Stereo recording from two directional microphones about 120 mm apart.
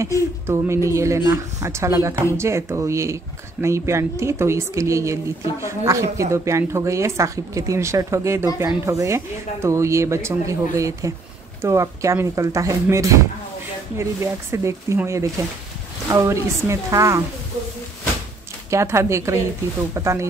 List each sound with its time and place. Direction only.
0.5 s a woman's voice: 20° right (ahead or behind)
18.7 s a woman's voice: 25° right (ahead or behind)